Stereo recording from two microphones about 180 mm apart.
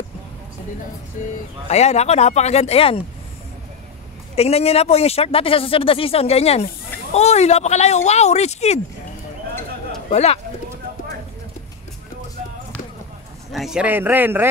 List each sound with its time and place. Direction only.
1.7 s speech: 35° left (ahead or behind)
4.4 s speech: 35° left (ahead or behind)
10.0 s speech: 35° left (ahead or behind)
13.5 s a man's voice: centre (ahead or behind)